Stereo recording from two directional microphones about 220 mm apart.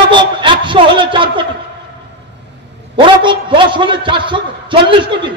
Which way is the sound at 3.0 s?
20° right (ahead or behind).